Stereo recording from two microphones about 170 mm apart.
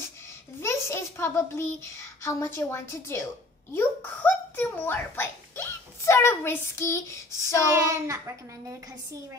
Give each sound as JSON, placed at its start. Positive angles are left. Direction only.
{"t": 0.6, "sound": "a child's voice", "side_deg": 15}
{"t": 7.7, "sound": "a woman's voice", "side_deg": -15}